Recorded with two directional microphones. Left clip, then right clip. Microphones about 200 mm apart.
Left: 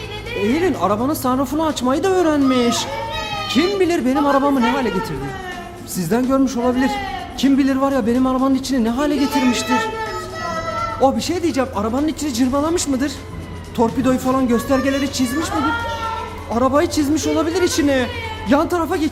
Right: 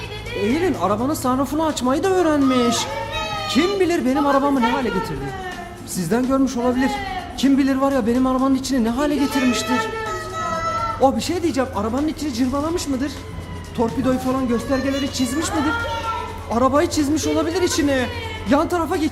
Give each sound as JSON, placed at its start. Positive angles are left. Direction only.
{"t": 0.3, "sound": "speech", "side_deg": 10}
{"t": 6.0, "sound": "speech", "side_deg": 5}
{"t": 11.0, "sound": "speech", "side_deg": 5}
{"t": 16.5, "sound": "speech", "side_deg": 0}